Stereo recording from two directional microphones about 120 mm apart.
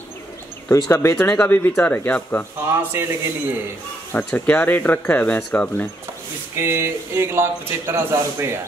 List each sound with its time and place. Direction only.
0.7 s speech: 25° left (ahead or behind)
1.1 s speech: 15° left (ahead or behind)
2.7 s speech: 20° right (ahead or behind)
4.1 s speech: 15° left (ahead or behind)
6.5 s speech: 20° right (ahead or behind)